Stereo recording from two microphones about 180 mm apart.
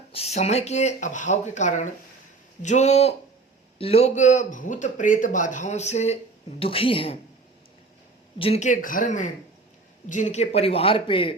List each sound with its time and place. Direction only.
0.1 s a man's voice: 35° left (ahead or behind)
8.4 s a man's voice: 35° left (ahead or behind)